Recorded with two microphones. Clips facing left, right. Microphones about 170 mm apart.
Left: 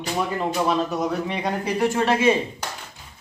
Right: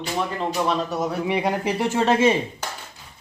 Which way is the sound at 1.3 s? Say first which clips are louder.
Right 1 dB; 15° right (ahead or behind).